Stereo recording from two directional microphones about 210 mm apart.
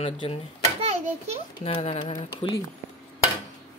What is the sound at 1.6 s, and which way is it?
Speech, 30° left (ahead or behind).